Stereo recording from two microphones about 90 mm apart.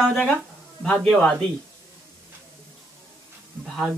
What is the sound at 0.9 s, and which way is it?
Speech, 15° left (ahead or behind).